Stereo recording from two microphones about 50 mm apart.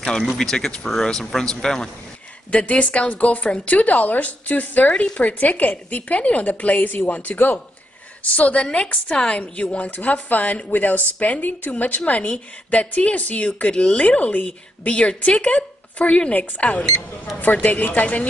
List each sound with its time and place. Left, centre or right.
0.2 s speech: centre
2.5 s a woman's voice: left
8.2 s a woman's voice: left
14.0 s a woman's voice: left